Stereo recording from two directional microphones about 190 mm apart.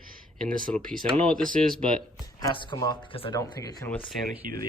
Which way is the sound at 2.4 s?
20° left (ahead or behind).